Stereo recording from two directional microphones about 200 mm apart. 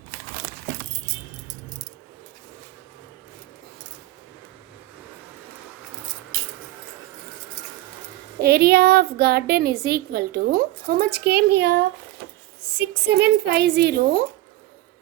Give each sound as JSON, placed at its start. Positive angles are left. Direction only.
{"t": 8.4, "sound": "a woman's voice", "side_deg": -50}
{"t": 13.1, "sound": "a woman's voice", "side_deg": -55}